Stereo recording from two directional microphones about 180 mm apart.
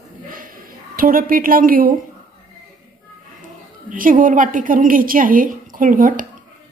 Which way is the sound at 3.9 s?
50° right (ahead or behind).